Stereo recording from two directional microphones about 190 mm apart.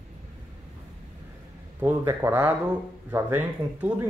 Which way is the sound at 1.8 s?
15° right (ahead or behind).